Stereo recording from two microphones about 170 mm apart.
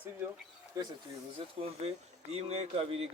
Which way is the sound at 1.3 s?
35° right (ahead or behind).